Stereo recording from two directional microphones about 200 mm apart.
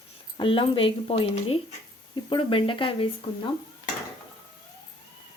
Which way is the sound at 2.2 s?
25° left (ahead or behind).